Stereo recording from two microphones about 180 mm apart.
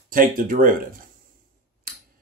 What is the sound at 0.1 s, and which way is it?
Speech, 50° right (ahead or behind).